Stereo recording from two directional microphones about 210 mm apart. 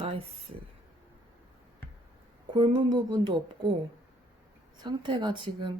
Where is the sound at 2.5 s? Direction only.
20° right (ahead or behind).